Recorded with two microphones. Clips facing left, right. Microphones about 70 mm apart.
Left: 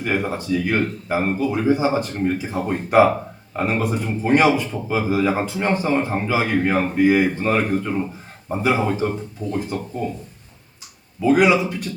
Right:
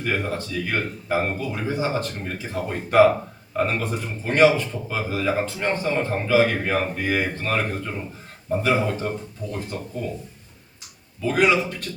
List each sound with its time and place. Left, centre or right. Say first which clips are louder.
0.0 s a man's voice: left 3 dB; centre
11.2 s a man's voice: left 4 dB; centre